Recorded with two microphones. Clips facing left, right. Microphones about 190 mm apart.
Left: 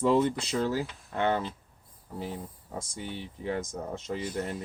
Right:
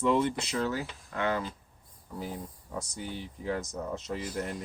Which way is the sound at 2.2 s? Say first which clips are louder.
Left 1 dB; 25° left (ahead or behind).